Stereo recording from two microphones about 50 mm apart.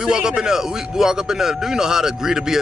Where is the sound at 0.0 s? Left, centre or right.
Centre.